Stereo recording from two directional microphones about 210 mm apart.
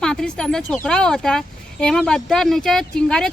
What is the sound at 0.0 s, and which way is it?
Speech, 5° left (ahead or behind).